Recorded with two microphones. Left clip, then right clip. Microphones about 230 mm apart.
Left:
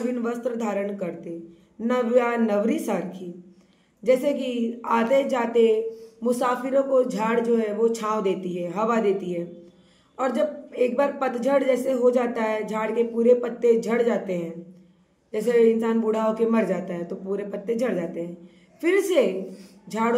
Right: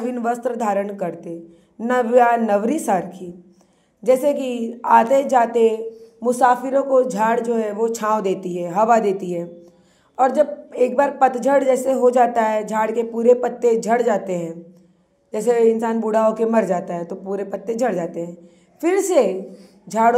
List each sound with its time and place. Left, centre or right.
0.1 s a man's voice: right